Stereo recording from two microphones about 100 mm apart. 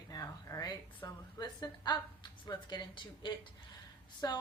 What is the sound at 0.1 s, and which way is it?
A woman's voice, 35° left (ahead or behind).